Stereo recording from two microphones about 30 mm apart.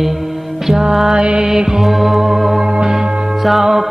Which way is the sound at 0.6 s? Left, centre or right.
Centre.